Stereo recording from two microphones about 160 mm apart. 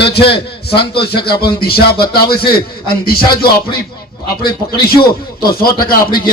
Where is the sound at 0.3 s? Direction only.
90° left.